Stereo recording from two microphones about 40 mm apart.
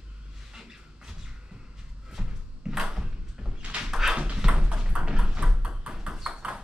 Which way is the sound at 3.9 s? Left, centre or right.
Centre.